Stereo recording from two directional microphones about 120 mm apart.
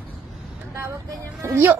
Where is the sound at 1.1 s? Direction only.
30° right (ahead or behind).